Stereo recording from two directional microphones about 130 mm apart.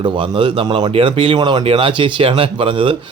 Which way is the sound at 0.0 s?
40° right (ahead or behind).